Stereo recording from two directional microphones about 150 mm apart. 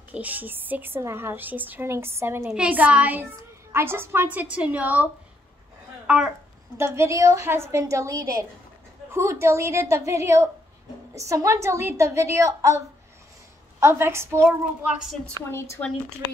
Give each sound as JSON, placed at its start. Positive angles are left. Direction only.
{"t": 0.1, "sound": "a woman's voice", "side_deg": -10}
{"t": 6.0, "sound": "speech", "side_deg": -5}
{"t": 6.8, "sound": "a woman's voice", "side_deg": -20}
{"t": 15.5, "sound": "speech", "side_deg": 20}